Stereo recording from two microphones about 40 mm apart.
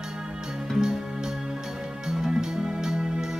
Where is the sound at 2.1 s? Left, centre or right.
Centre.